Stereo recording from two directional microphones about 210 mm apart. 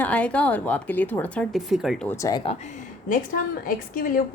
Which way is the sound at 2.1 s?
15° left (ahead or behind).